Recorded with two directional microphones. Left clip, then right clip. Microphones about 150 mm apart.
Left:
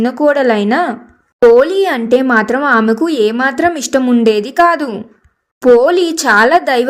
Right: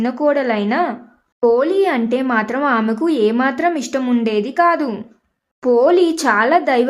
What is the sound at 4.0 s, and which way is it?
Speech, 20° left (ahead or behind).